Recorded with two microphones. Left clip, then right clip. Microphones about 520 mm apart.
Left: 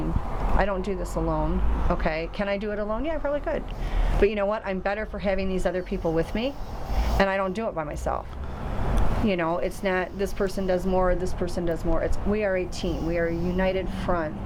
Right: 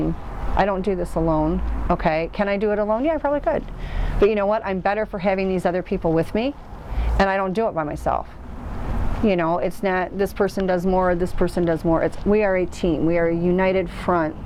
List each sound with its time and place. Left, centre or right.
0.5 s speech: right
9.2 s speech: right